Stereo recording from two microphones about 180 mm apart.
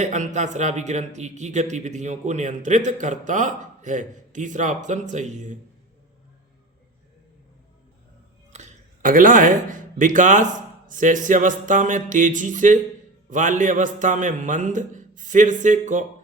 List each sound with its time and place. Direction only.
0.0 s speech: 40° right (ahead or behind)
8.5 s speech: 45° right (ahead or behind)